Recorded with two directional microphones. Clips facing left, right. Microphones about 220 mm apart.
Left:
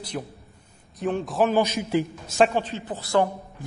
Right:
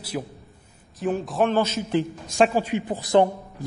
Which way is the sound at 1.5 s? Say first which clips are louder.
Even; 15° left (ahead or behind).